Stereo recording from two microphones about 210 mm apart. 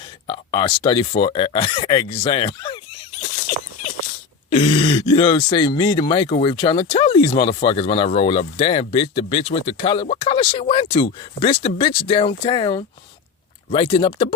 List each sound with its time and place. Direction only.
0.3 s speech: 20° left (ahead or behind)
3.2 s a sound: 35° left (ahead or behind)
4.4 s speech: 30° left (ahead or behind)